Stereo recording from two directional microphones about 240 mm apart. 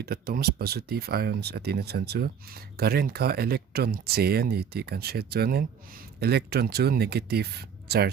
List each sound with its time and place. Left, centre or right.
0.0 s speech: right